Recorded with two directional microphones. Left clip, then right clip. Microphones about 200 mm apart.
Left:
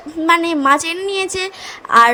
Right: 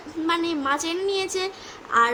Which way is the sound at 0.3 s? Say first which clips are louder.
Left 11 dB; 35° left (ahead or behind).